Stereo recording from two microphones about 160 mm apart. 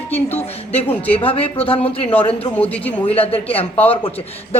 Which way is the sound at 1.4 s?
35° left (ahead or behind).